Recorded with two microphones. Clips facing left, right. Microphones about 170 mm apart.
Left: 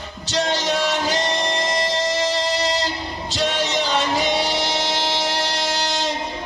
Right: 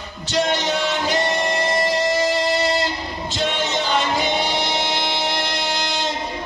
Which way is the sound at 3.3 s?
40° left (ahead or behind).